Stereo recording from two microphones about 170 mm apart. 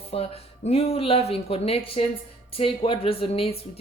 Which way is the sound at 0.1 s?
35° left (ahead or behind).